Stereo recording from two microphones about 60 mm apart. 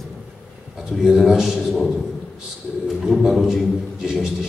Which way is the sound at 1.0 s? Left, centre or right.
Centre.